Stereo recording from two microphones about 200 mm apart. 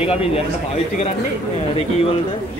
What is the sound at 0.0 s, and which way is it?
Speech, 30° left (ahead or behind).